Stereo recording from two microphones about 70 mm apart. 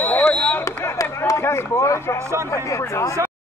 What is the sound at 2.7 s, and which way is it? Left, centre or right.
Speech, left.